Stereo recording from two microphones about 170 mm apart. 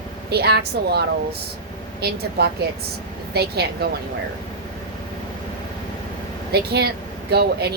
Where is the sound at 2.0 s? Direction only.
75° right (ahead or behind).